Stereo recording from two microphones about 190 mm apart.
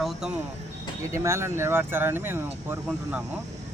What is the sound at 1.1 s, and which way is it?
Speech, 15° right (ahead or behind).